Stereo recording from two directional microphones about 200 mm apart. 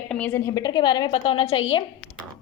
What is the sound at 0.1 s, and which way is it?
A woman's voice, 10° left (ahead or behind).